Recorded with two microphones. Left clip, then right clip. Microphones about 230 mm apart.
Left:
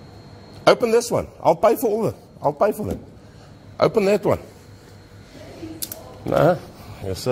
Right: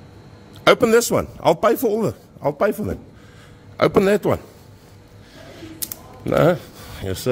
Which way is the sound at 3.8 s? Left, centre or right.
Right.